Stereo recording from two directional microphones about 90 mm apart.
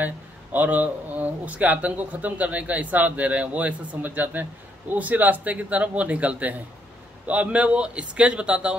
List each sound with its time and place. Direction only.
0.0 s speech: 15° right (ahead or behind)